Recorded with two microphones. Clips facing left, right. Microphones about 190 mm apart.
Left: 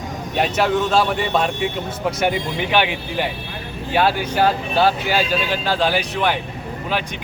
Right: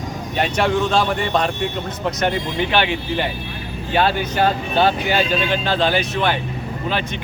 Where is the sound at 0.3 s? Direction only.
Centre (ahead or behind).